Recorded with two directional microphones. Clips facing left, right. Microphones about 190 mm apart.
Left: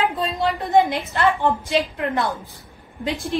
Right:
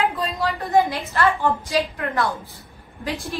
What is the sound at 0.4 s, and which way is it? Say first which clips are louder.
A woman's voice: left 2 dB; 20° left (ahead or behind).